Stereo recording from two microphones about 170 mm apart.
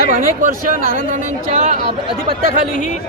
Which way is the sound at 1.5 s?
40° right (ahead or behind).